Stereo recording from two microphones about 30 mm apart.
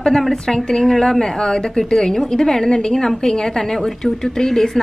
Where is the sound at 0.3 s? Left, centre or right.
Centre.